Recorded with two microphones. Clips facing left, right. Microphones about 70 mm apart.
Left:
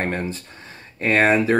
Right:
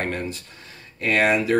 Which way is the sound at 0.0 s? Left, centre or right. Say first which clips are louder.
Left 2 dB; left.